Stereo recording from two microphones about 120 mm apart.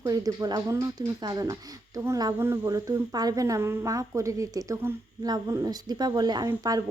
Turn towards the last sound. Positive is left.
turn(degrees=-30)  # may be behind; listen again after turning